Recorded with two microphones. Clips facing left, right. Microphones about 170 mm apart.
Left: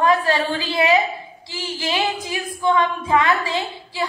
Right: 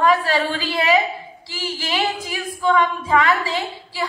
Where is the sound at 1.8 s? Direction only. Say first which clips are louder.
Left 1 dB; 20° left (ahead or behind).